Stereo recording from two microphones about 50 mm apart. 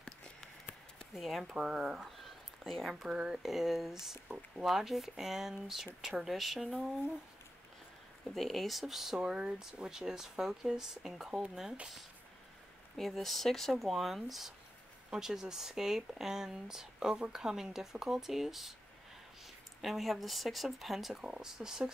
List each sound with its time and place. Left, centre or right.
0.0 s a sound: centre
1.1 s speech: centre
1.6 s speech: centre
2.0 s a sound: centre
3.0 s speech: centre
3.4 s speech: centre
8.4 s speech: centre
12.9 s speech: centre
21.1 s speech: centre